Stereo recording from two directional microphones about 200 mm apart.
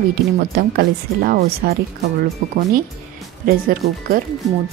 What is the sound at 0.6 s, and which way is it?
Speech, 50° right (ahead or behind).